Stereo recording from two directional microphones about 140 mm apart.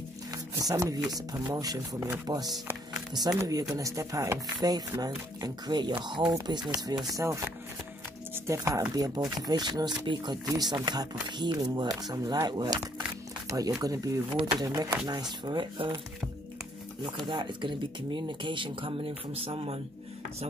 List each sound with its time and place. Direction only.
0.3 s music: 25° right (ahead or behind)
1.1 s speech: 25° right (ahead or behind)
8.5 s speech: 20° right (ahead or behind)
17.3 s speech: 35° right (ahead or behind)